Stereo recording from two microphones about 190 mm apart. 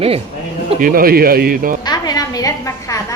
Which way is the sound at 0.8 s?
50° right (ahead or behind).